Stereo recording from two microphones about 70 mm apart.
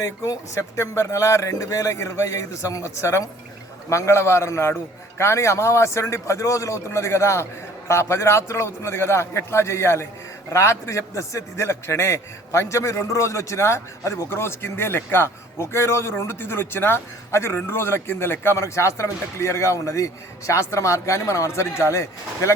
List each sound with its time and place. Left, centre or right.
0.0 s a man's voice: left